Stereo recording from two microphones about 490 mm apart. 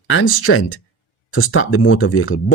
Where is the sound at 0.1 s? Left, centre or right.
Left.